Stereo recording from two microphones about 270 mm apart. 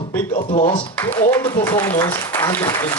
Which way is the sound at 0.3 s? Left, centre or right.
Left.